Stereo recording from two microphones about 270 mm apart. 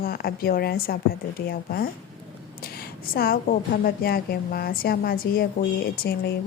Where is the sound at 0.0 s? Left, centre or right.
Left.